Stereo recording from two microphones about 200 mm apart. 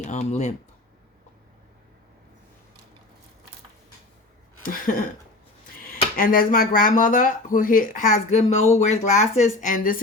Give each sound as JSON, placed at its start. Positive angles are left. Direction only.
{"t": 0.0, "sound": "speech", "side_deg": 35}
{"t": 4.6, "sound": "a sound", "side_deg": 45}
{"t": 6.1, "sound": "speech", "side_deg": 45}